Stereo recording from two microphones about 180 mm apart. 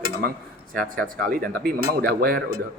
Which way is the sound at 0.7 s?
50° right (ahead or behind).